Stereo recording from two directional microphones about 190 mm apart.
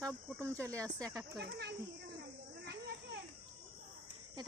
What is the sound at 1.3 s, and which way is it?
Speech, 60° right (ahead or behind).